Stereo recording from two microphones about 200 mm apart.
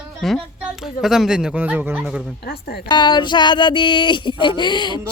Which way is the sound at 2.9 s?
20° left (ahead or behind).